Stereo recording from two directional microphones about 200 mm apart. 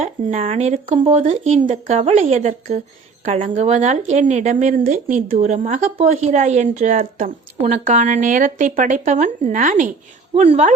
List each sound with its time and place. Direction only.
0.0 s a woman's voice: 35° right (ahead or behind)